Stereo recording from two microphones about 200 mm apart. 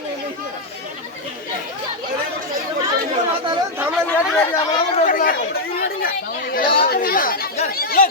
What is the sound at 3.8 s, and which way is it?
Chatter, centre (ahead or behind).